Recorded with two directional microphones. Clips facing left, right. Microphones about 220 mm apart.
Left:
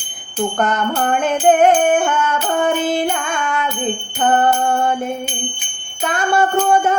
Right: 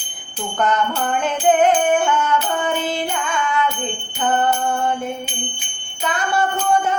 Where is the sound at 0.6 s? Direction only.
50° left (ahead or behind).